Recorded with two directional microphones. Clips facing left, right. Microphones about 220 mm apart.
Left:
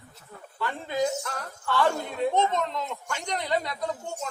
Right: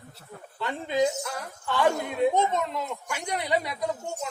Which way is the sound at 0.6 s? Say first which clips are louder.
Right 2 dB; 20° right (ahead or behind).